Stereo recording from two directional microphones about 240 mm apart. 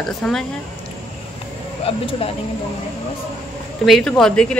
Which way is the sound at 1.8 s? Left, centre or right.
Left.